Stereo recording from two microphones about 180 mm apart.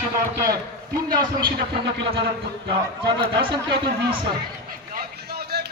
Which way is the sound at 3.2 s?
25° right (ahead or behind).